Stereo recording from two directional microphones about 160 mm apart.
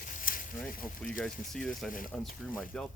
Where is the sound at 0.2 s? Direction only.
60° left (ahead or behind).